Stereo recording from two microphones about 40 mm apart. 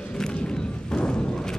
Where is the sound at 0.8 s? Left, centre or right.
Left.